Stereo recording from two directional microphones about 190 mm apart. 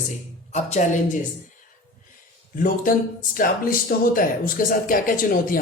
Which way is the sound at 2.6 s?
45° left (ahead or behind).